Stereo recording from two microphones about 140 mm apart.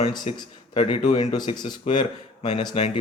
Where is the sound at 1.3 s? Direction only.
30° left (ahead or behind).